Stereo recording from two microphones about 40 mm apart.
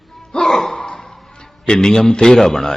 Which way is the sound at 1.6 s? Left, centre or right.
Centre.